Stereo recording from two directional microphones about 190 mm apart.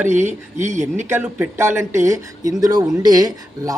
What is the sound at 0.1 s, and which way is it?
Speech, 40° right (ahead or behind).